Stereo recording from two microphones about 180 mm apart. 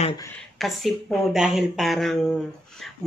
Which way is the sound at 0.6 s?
Centre (ahead or behind).